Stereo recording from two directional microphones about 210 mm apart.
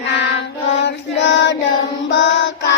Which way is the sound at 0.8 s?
60° left (ahead or behind).